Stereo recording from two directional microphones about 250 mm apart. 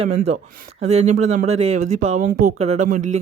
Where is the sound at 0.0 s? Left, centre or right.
Right.